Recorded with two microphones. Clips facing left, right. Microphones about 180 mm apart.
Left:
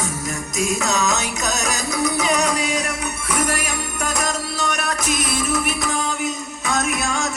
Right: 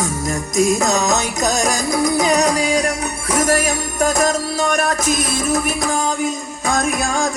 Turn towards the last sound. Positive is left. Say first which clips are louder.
# right 4 dB
turn(degrees=-35)  # may be behind; listen again after turning